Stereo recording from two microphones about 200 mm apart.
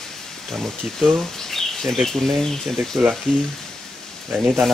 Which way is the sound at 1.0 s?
Centre (ahead or behind).